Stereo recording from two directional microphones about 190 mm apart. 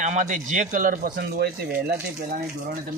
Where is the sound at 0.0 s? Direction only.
40° right (ahead or behind).